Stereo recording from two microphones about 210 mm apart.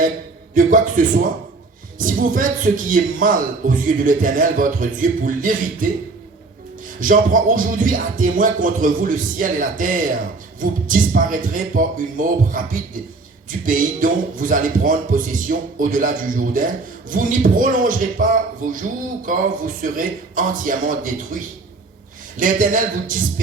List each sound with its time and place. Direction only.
0.5 s a man's voice: 40° right (ahead or behind)
7.0 s a man's voice: 40° right (ahead or behind)
13.7 s a man's voice: 40° right (ahead or behind)